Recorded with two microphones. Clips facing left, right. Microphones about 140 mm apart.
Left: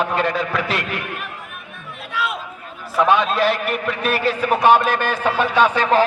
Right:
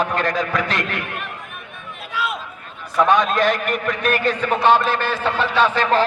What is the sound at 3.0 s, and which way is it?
A man's voice, 5° left (ahead or behind).